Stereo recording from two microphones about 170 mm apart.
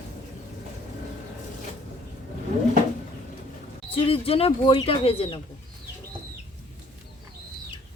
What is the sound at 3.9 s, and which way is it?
Speech, 35° left (ahead or behind).